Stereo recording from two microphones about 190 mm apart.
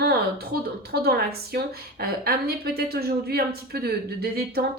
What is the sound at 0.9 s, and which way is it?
A woman's voice, 55° right (ahead or behind).